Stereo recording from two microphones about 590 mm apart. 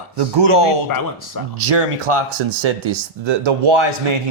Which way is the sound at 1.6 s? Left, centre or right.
Right.